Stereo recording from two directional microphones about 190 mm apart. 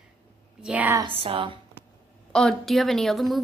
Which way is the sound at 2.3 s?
Centre (ahead or behind).